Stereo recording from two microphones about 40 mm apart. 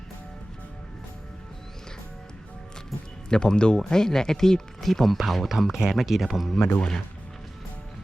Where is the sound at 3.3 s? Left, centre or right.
Centre.